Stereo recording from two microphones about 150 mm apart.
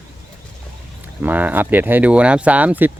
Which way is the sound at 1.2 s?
10° right (ahead or behind).